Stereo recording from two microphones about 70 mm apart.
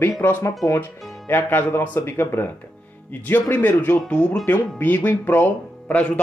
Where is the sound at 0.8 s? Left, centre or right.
Left.